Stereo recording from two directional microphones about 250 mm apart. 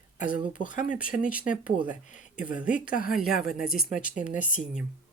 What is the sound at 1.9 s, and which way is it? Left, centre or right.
Speech, left.